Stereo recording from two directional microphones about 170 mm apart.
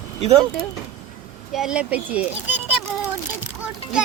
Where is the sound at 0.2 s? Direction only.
35° right (ahead or behind).